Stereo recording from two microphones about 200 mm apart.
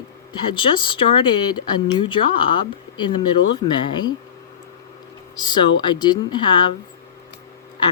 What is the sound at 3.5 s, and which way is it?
Speech, 20° left (ahead or behind).